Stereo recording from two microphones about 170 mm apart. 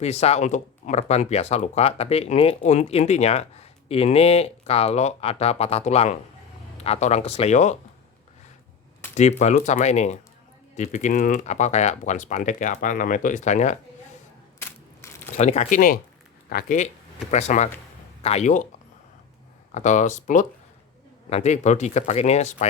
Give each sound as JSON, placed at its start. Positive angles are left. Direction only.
{"t": 0.0, "sound": "speech", "side_deg": 40}
{"t": 9.4, "sound": "speech", "side_deg": 45}
{"t": 15.0, "sound": "a sound", "side_deg": 15}
{"t": 15.4, "sound": "speech", "side_deg": 40}
{"t": 16.5, "sound": "speech", "side_deg": 60}
{"t": 17.3, "sound": "speech", "side_deg": 40}
{"t": 19.7, "sound": "speech", "side_deg": 45}